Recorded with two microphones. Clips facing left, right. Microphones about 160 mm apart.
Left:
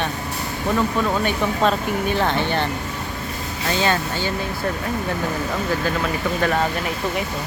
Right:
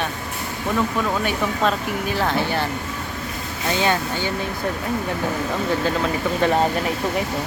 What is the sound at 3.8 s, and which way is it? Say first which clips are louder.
Speech: even; 15° right (ahead or behind).